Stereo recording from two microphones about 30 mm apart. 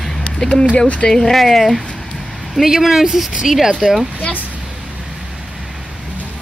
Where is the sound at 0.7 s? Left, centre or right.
Left.